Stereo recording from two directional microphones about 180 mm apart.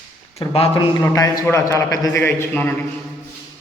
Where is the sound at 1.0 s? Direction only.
15° left (ahead or behind).